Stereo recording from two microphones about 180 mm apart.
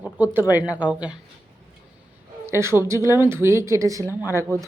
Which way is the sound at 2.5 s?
15° right (ahead or behind).